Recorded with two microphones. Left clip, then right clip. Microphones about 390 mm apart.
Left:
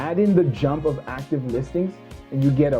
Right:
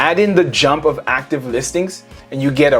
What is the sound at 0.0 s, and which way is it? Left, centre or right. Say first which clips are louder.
Speech: right 8 dB; centre.